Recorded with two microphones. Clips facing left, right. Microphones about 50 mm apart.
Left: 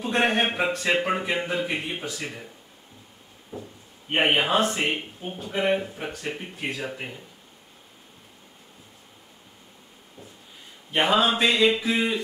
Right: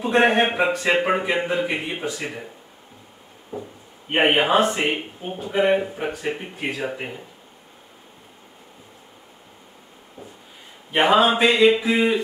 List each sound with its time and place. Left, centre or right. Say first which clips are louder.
0.0 s speech: right 5 dB; centre
3.5 s a sound: right 5 dB; right
4.1 s speech: right 4 dB; centre
10.9 s speech: right 5 dB; centre